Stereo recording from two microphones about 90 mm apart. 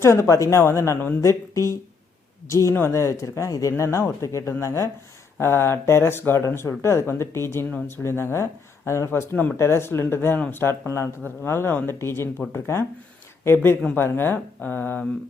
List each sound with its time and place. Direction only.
0.0 s speech: 30° left (ahead or behind)